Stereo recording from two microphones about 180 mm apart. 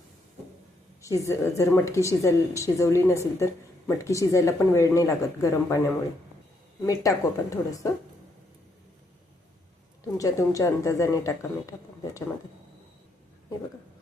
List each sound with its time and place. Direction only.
1.0 s a woman's voice: 15° left (ahead or behind)
6.8 s speech: 20° left (ahead or behind)
10.2 s a woman's voice: 20° left (ahead or behind)